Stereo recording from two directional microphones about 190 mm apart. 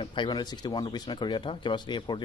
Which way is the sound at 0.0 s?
25° left (ahead or behind).